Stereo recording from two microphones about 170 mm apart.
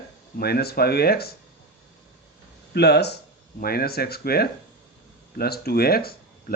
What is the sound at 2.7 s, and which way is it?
Speech, 75° left (ahead or behind).